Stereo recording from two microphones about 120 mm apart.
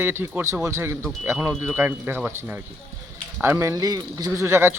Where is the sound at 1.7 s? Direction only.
15° right (ahead or behind).